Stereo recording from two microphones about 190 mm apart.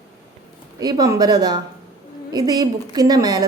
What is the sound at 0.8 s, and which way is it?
A woman's voice, 20° right (ahead or behind).